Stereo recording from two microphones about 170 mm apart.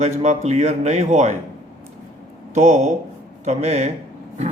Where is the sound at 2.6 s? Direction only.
45° right (ahead or behind).